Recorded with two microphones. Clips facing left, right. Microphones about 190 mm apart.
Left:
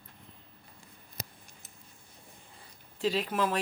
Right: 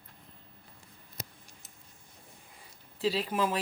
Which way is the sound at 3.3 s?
10° right (ahead or behind).